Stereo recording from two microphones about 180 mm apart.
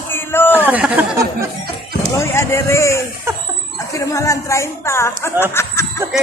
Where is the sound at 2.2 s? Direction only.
15° left (ahead or behind).